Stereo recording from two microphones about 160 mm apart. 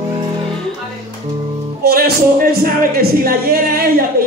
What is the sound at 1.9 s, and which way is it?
Speech, 70° right (ahead or behind).